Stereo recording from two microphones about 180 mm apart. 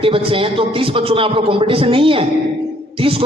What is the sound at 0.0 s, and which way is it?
A man's voice, 30° right (ahead or behind).